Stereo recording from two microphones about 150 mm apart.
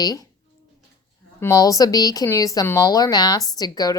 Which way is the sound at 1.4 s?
20° left (ahead or behind).